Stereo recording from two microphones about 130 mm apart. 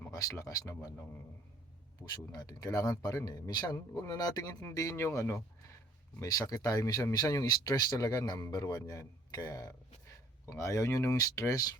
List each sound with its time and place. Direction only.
0.1 s speech: 25° left (ahead or behind)
2.3 s speech: 30° left (ahead or behind)